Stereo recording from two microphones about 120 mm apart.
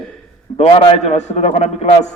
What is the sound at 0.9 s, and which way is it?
A man's voice, 70° left (ahead or behind).